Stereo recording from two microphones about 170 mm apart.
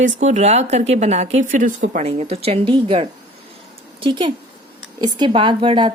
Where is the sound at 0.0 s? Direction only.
45° right (ahead or behind).